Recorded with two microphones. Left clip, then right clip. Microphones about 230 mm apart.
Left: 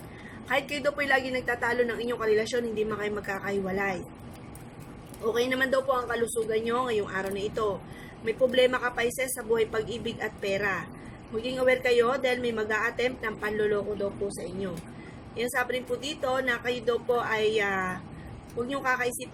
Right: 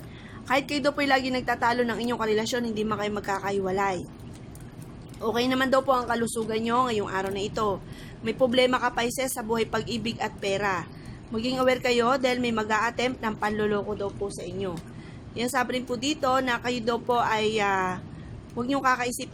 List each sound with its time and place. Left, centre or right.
0.4 s a woman's voice: right
5.3 s a woman's voice: right
15.4 s a woman's voice: right